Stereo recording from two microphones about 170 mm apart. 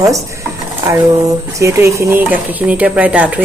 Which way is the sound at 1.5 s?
15° right (ahead or behind).